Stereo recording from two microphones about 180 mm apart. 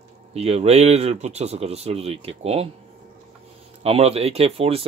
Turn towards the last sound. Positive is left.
turn(degrees=-35)  # may be behind; listen again after turning